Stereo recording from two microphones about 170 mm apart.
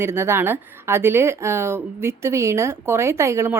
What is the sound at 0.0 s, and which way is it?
Speech, 15° right (ahead or behind).